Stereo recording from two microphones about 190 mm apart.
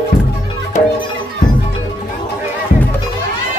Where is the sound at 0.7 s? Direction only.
40° left (ahead or behind).